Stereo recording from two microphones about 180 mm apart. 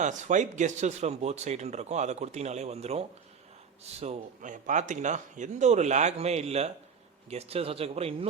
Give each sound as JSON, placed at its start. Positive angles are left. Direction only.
{"t": 0.0, "sound": "speech", "side_deg": -40}